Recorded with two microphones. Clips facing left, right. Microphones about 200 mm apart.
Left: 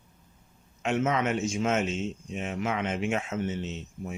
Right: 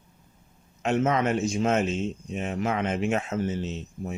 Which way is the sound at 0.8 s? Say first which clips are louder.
Right 3 dB; 35° right (ahead or behind).